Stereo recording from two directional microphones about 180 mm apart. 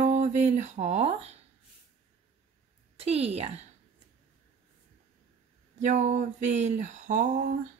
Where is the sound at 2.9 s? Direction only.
35° right (ahead or behind).